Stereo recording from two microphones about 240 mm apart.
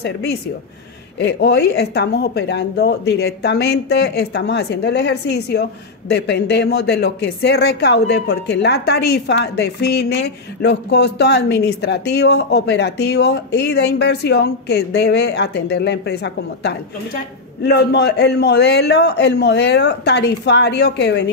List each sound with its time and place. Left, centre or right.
0.0 s a woman's voice: left